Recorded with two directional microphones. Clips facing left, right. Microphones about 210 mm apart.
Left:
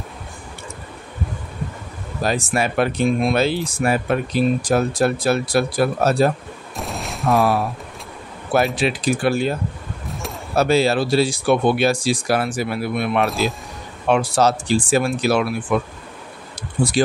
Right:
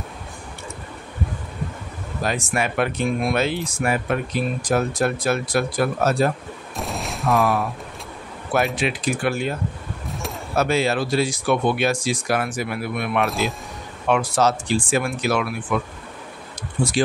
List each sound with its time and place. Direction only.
2.2 s speech: 35° left (ahead or behind)
6.8 s fusillade: centre (ahead or behind)
8.7 s speech: 35° left (ahead or behind)
13.3 s speech: centre (ahead or behind)
14.0 s speech: 30° left (ahead or behind)